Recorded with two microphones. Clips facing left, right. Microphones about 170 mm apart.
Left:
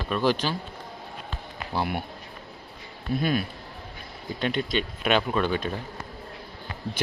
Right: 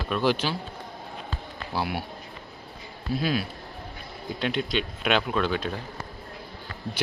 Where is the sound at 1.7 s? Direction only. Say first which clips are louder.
Left 1 dB; 5° right (ahead or behind).